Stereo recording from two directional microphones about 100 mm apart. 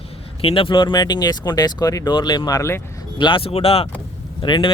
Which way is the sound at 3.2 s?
55° left (ahead or behind).